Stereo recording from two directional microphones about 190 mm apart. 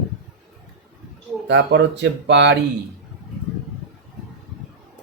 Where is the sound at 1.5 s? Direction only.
65° right (ahead or behind).